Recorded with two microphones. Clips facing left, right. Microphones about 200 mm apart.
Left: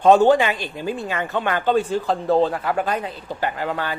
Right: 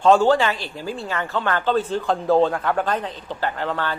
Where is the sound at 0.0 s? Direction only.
20° left (ahead or behind).